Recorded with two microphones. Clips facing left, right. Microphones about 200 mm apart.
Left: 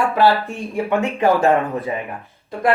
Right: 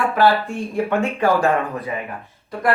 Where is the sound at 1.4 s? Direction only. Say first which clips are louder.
Left 3 dB; 30° left (ahead or behind).